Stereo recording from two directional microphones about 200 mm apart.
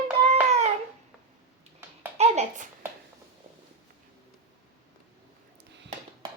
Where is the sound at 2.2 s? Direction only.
35° right (ahead or behind).